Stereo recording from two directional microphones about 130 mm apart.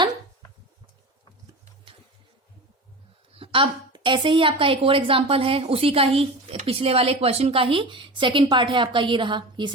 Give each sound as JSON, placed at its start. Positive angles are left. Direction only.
{"t": 3.3, "sound": "a woman's voice", "side_deg": -45}